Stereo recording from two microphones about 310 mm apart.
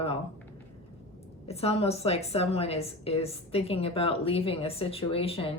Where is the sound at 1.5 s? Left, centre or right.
Centre.